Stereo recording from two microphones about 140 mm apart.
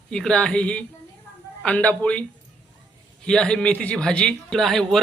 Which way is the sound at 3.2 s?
5° left (ahead or behind).